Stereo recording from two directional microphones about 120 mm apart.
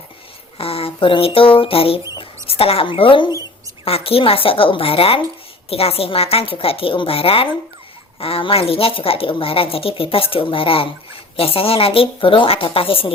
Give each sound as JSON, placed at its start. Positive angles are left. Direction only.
{"t": 0.6, "sound": "speech", "side_deg": 55}